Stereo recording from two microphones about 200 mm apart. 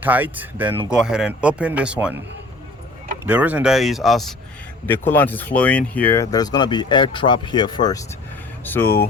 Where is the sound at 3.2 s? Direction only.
10° right (ahead or behind).